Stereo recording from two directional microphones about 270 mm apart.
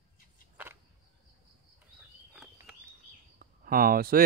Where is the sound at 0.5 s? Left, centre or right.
Centre.